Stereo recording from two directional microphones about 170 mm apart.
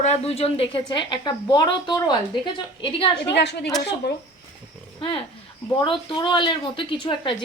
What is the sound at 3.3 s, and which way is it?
Speech, 90° left.